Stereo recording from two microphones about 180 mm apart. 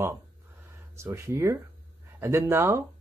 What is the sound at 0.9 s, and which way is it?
Speech, 15° right (ahead or behind).